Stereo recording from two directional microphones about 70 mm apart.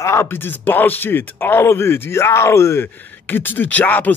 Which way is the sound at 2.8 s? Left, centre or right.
Left.